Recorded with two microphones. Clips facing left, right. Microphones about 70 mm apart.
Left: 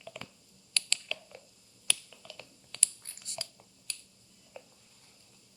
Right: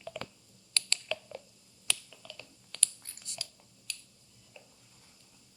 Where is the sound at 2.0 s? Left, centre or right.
Centre.